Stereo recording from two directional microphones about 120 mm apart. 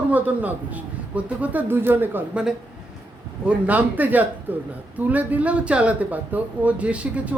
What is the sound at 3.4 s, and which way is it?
A woman's voice, 15° right (ahead or behind).